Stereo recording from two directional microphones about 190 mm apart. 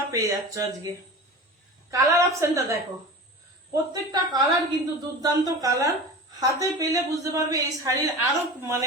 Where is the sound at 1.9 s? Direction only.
15° right (ahead or behind).